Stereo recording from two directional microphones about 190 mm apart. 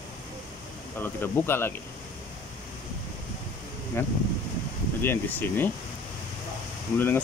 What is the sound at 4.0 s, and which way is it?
Speech, 10° left (ahead or behind).